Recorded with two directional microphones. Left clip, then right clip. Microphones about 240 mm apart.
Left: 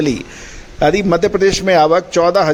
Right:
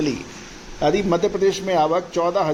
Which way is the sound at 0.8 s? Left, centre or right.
Left.